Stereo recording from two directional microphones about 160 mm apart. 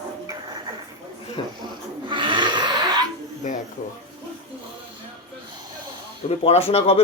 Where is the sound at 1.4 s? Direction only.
35° left (ahead or behind).